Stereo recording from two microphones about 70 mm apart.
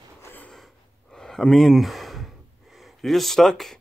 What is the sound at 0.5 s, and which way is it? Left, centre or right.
Gasp, centre.